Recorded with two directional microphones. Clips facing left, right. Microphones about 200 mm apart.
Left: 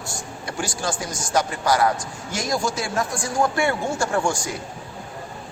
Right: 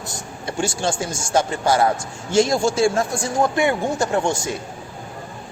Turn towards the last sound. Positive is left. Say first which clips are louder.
# right 2 dB
turn(degrees=-20)  # may be behind; listen again after turning